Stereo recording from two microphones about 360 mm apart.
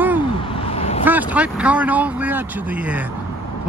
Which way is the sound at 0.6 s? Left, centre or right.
Centre.